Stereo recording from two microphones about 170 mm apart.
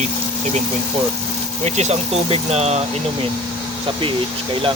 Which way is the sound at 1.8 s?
40° right (ahead or behind).